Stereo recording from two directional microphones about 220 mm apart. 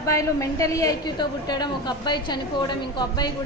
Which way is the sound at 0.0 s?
15° left (ahead or behind).